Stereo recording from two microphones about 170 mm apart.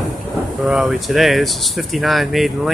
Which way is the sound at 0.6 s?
Centre (ahead or behind).